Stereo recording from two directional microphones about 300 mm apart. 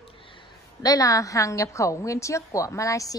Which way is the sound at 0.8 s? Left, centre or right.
Centre.